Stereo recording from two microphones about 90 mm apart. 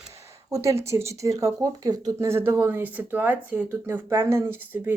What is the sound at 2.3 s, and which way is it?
Speech, 25° right (ahead or behind).